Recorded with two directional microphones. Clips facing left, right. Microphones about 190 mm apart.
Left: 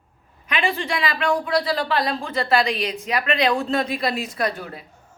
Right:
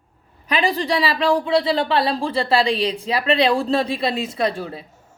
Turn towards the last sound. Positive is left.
turn(degrees=-30)  # may be behind; listen again after turning